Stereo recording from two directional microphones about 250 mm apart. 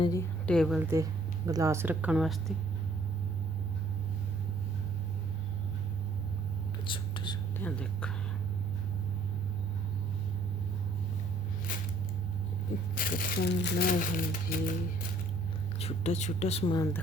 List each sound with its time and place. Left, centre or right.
0.0 s a woman's voice: centre
6.8 s whispering: centre
7.6 s speech: centre
11.7 s a sound: left
13.0 s speech: left
15.8 s speech: left